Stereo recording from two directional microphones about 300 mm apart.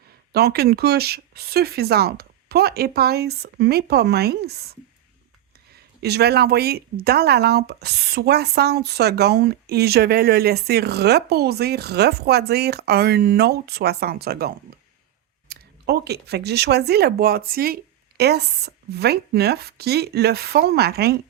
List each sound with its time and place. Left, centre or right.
0.3 s speech: right
6.0 s speech: right